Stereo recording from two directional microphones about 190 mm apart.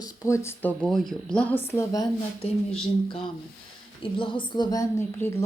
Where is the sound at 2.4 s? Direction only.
30° left (ahead or behind).